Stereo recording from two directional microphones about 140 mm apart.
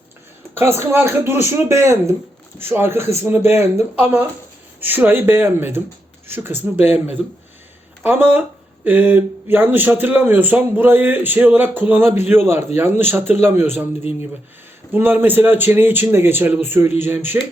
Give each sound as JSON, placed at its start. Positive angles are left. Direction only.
{"t": 0.5, "sound": "speech", "side_deg": -15}
{"t": 8.0, "sound": "speech", "side_deg": -15}
{"t": 14.9, "sound": "speech", "side_deg": -15}